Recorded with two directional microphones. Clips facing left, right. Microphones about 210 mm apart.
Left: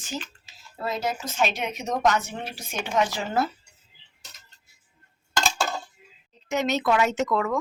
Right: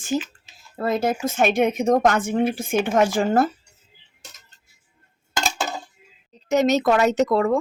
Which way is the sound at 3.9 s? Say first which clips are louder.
Right 4 dB; 50° right (ahead or behind).